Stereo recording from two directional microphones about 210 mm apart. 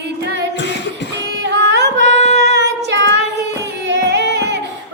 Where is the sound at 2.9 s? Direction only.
55° right (ahead or behind).